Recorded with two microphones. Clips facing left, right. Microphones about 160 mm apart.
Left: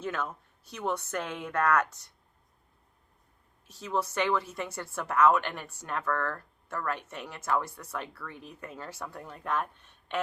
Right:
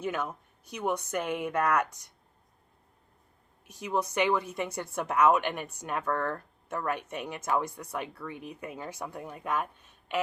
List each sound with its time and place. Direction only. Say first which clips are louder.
0.0 s speech: right 2 dB; 15° right (ahead or behind)
3.7 s speech: right 1 dB; 15° right (ahead or behind)